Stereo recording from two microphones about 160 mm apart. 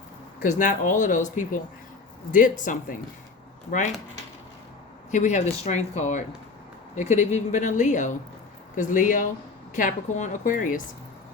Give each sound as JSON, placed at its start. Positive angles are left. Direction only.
{"t": 0.3, "sound": "a woman's voice", "side_deg": 55}
{"t": 5.1, "sound": "a woman's voice", "side_deg": 45}